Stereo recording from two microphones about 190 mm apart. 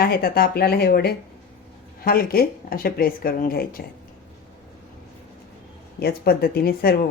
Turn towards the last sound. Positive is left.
turn(degrees=55)  # may be behind; listen again after turning